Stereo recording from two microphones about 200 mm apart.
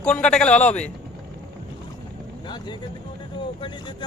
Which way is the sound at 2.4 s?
20° left (ahead or behind).